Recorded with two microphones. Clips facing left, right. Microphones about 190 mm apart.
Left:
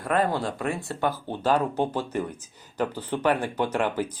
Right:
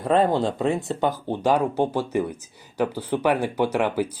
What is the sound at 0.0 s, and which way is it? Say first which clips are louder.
Speech: right 5 dB; 25° right (ahead or behind).